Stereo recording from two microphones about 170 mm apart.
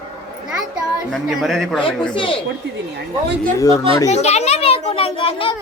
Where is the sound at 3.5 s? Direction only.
20° left (ahead or behind).